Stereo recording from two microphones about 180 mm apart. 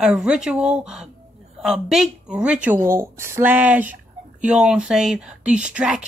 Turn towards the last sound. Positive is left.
turn(degrees=-5)  # may be behind; listen again after turning